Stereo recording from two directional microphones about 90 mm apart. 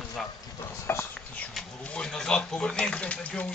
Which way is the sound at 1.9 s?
10° left (ahead or behind).